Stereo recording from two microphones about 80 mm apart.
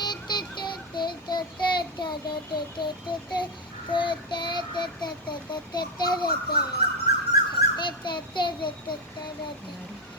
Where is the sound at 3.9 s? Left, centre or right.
Left.